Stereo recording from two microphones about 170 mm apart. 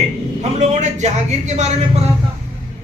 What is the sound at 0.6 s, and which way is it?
Speech, 45° right (ahead or behind).